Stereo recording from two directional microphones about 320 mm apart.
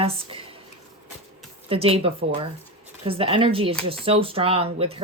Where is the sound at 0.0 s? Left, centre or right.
Centre.